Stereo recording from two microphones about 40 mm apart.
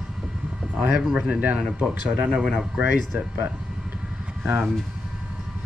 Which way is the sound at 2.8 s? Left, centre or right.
Right.